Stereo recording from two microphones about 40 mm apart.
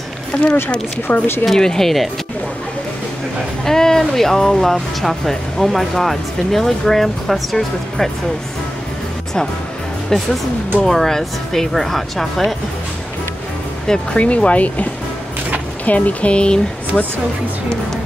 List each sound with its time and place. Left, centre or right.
0.3 s speech: left
1.1 s speech: left
1.4 s speech: centre
3.6 s speech: centre
10.8 s speech: centre
14.1 s speech: left